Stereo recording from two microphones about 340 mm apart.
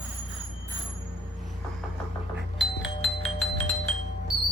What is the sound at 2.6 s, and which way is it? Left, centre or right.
Music, centre.